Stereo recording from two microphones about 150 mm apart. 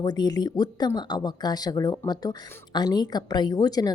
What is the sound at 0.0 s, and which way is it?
A woman's voice, 25° left (ahead or behind).